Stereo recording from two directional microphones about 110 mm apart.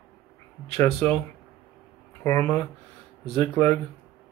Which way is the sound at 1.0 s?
20° left (ahead or behind).